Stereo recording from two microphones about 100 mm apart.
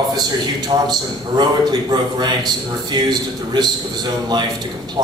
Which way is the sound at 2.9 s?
45° right (ahead or behind).